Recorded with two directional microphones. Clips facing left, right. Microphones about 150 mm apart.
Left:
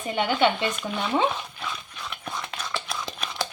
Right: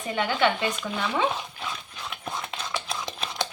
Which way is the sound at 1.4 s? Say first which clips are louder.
Even; 10° right (ahead or behind).